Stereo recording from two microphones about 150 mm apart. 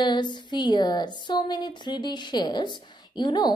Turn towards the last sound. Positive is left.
turn(degrees=30)  # may be behind; listen again after turning